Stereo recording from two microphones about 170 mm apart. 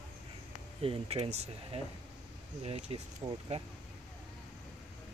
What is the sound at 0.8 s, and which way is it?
Speech, 35° right (ahead or behind).